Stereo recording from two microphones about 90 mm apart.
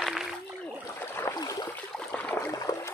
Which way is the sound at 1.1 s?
30° left (ahead or behind).